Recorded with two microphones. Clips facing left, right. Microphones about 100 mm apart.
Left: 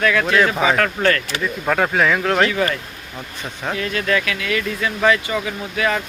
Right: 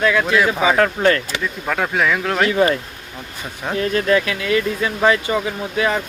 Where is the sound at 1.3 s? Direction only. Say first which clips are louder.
Left 2 dB; centre (ahead or behind).